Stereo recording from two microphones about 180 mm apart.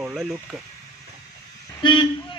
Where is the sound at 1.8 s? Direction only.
25° left (ahead or behind).